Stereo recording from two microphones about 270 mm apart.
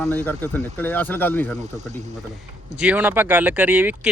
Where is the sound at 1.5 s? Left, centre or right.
Right.